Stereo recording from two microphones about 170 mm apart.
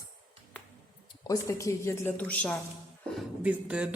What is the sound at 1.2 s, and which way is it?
Speech, 20° left (ahead or behind).